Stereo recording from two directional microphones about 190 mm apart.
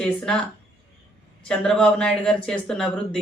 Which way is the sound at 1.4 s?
5° left (ahead or behind).